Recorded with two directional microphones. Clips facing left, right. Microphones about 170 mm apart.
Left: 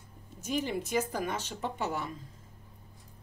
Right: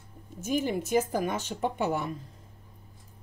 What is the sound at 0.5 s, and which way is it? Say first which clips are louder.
Speech: right 4 dB; 50° right (ahead or behind).